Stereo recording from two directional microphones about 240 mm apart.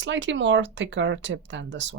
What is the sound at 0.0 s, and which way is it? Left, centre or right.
Speech, right.